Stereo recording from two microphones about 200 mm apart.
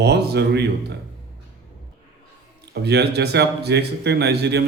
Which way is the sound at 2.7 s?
55° right (ahead or behind).